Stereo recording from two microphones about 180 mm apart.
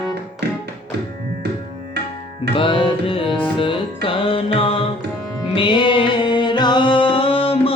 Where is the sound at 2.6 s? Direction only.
30° left (ahead or behind).